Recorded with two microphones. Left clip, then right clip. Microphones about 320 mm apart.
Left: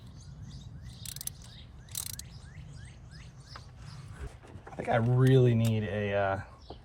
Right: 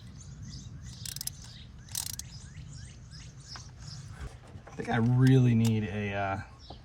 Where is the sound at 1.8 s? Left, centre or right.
Centre.